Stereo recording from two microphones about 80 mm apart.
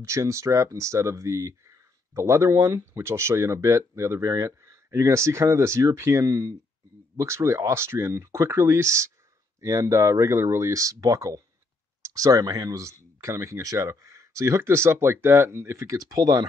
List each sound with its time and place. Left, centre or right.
0.0 s speech: right
7.2 s speech: right